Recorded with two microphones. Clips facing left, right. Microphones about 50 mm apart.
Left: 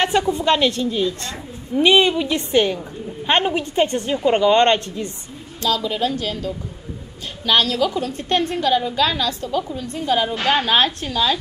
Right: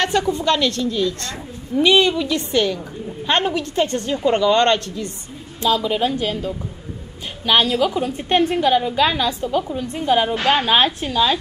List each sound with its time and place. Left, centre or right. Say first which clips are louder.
0.0 s a woman's voice: left 1 dB; left
5.6 s a woman's voice: right 2 dB; right